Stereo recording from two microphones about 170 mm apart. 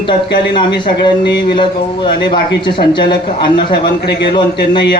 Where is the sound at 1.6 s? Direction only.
30° left (ahead or behind).